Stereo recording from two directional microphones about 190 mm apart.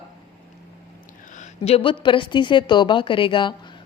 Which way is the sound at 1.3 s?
35° left (ahead or behind).